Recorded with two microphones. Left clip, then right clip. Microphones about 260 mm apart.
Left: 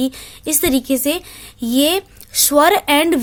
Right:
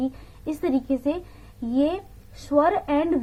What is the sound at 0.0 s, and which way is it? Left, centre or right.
A woman's voice, left.